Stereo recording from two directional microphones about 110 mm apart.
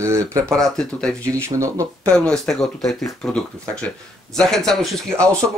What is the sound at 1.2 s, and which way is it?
Speech, 30° right (ahead or behind).